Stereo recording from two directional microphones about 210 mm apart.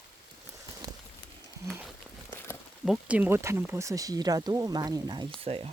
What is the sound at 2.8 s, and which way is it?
Speech, 5° right (ahead or behind).